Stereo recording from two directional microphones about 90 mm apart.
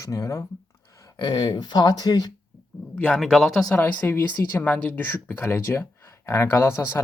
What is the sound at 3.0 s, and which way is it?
Speech, 10° left (ahead or behind).